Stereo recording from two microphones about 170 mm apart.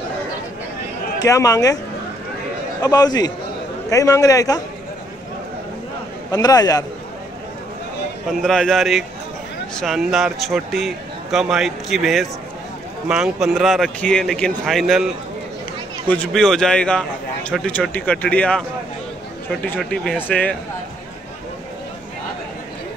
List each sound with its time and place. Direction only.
1.2 s a man's voice: 20° left (ahead or behind)
2.8 s a man's voice: 25° left (ahead or behind)
6.3 s a man's voice: 20° left (ahead or behind)
8.3 s a man's voice: centre (ahead or behind)
16.1 s a man's voice: 5° left (ahead or behind)
19.8 s a man's voice: 10° left (ahead or behind)